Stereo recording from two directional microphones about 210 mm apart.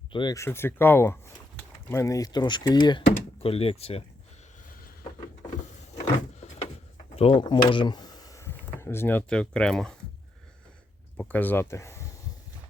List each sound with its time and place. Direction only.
0.1 s speech: 20° left (ahead or behind)
6.0 s vehicle: 30° left (ahead or behind)
7.2 s speech: 25° left (ahead or behind); by 10.0 s 5° left (ahead or behind)
11.2 s speech: 10° left (ahead or behind)